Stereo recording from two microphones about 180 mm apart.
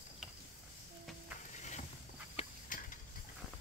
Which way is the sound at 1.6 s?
40° left (ahead or behind).